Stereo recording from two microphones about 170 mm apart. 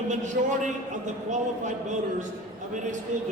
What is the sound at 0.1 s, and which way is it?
A man's voice, 45° right (ahead or behind).